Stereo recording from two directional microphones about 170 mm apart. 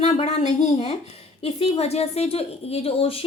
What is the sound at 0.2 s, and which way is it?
A woman's voice, 40° left (ahead or behind).